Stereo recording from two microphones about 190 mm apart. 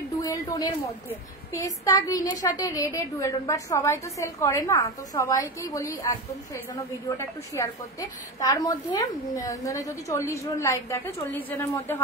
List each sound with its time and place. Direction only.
0.2 s a woman's voice: 20° left (ahead or behind)